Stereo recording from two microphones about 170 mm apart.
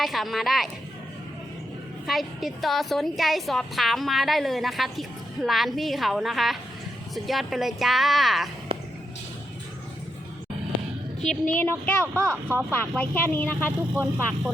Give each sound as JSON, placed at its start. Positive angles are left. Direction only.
{"t": 0.0, "sound": "a woman's voice", "side_deg": 0}
{"t": 2.0, "sound": "a woman's voice", "side_deg": 0}
{"t": 11.5, "sound": "a woman's voice", "side_deg": 10}
{"t": 12.1, "sound": "speech", "side_deg": -15}
{"t": 13.0, "sound": "a woman's voice", "side_deg": 10}
{"t": 13.9, "sound": "speech", "side_deg": -10}